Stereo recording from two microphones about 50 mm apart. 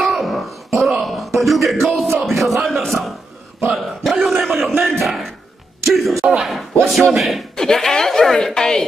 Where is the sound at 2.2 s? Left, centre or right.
Centre.